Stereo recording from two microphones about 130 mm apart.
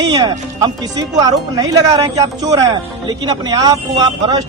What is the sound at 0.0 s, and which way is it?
A man's voice, 30° right (ahead or behind).